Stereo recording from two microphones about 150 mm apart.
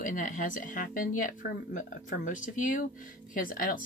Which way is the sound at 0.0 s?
60° left (ahead or behind).